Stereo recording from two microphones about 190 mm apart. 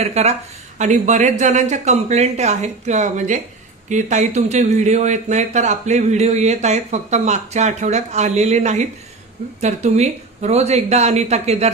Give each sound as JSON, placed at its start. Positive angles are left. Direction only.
{"t": 0.0, "sound": "speech", "side_deg": -35}